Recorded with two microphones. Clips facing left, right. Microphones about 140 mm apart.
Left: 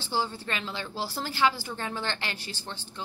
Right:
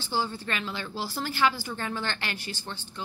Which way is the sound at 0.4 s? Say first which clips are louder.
Right 1 dB; 25° left (ahead or behind).